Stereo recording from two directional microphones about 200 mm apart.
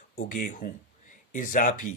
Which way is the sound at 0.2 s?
40° left (ahead or behind).